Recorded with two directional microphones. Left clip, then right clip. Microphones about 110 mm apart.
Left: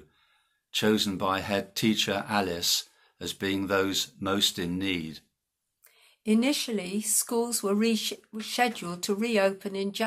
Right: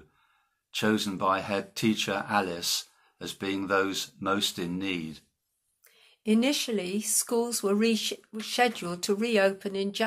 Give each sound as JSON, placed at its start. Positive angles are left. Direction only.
{"t": 0.7, "sound": "speech", "side_deg": 35}
{"t": 5.9, "sound": "speech", "side_deg": -15}